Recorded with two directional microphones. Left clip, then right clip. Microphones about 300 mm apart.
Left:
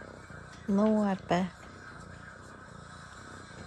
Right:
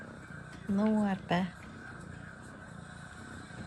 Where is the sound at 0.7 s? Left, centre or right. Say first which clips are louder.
Left 4 dB; centre.